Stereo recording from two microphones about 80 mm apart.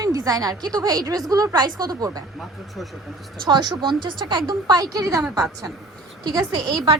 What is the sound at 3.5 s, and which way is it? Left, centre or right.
A woman's voice, right.